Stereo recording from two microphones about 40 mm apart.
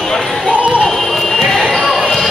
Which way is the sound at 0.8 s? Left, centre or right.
Centre.